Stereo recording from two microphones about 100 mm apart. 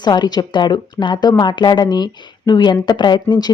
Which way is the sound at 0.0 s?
45° left (ahead or behind).